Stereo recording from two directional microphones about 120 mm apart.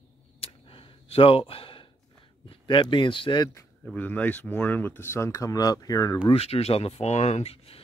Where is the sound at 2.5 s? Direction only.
40° left (ahead or behind).